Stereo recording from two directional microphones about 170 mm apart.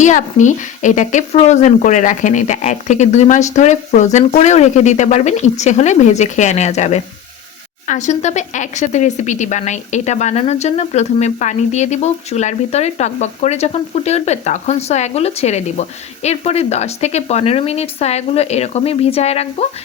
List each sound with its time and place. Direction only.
0.0 s speech: 45° left (ahead or behind)